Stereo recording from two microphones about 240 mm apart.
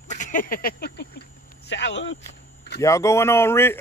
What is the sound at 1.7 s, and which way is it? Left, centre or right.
Speech, left.